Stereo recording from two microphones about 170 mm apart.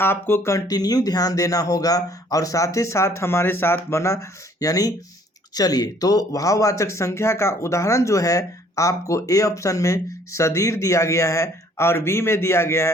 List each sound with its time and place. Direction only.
0.0 s speech: 15° left (ahead or behind)